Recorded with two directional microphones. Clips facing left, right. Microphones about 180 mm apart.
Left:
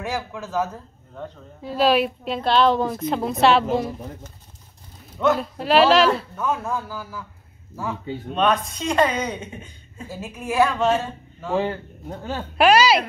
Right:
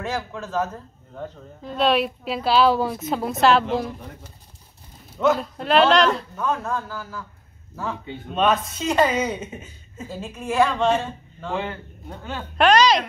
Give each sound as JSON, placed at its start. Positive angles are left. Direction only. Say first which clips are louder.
{"t": 0.0, "sound": "a woman's voice", "louder": "even", "side_deg": 10}
{"t": 5.1, "sound": "a woman's voice", "louder": "even", "side_deg": 0}
{"t": 8.4, "sound": "a woman's voice", "louder": "even", "side_deg": -5}
{"t": 10.0, "sound": "a woman's voice", "louder": "even", "side_deg": 5}
{"t": 11.5, "sound": "a man's voice", "louder": "left 5 dB", "side_deg": 35}
{"t": 12.5, "sound": "a woman's voice", "louder": "left 1 dB", "side_deg": 5}